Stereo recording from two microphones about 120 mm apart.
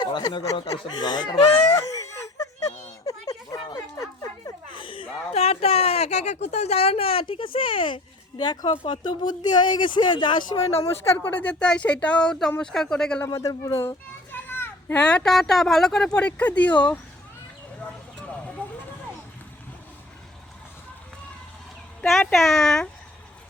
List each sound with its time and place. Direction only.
0.0 s speech: 40° left (ahead or behind)
1.7 s wail: 30° left (ahead or behind)
3.2 s a sound: 35° left (ahead or behind)
3.8 s dog: 25° left (ahead or behind)
4.8 s speech: 45° left (ahead or behind)
11.2 s speech: 15° left (ahead or behind)
13.2 s a man's voice: 30° left (ahead or behind)
13.8 s children playing: 15° left (ahead or behind)
15.0 s speech: 5° left (ahead or behind)
22.0 s speech: centre (ahead or behind)